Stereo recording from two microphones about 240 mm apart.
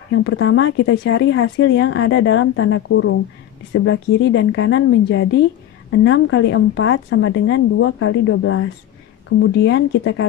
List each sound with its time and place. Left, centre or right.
0.1 s a woman's voice: left
9.4 s speech: left